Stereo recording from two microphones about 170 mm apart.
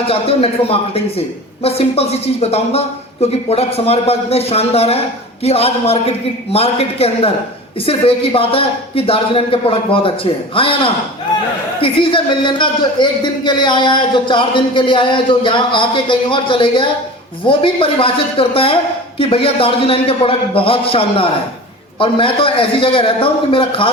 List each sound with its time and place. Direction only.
0.1 s a man's voice: 35° left (ahead or behind)